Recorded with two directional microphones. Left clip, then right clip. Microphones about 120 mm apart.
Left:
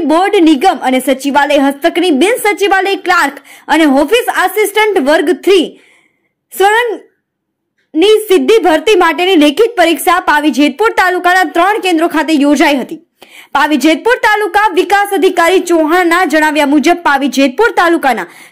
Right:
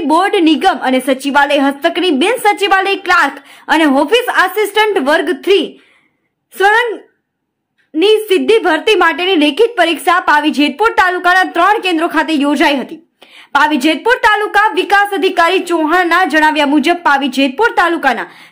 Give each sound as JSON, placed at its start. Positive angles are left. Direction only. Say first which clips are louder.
{"t": 0.1, "sound": "a woman's voice", "louder": "left 2 dB", "side_deg": 20}
{"t": 8.0, "sound": "a woman's voice", "louder": "left 3 dB", "side_deg": 25}